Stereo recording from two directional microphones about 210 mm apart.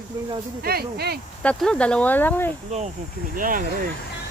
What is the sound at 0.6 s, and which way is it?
Speech, 50° right (ahead or behind).